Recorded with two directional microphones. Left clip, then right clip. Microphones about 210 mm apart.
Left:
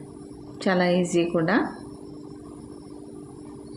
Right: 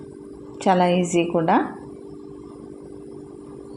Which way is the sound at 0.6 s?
10° right (ahead or behind).